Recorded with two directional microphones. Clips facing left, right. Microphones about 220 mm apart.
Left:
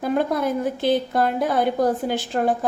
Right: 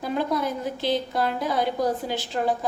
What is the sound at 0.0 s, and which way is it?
A woman's voice, 55° left (ahead or behind).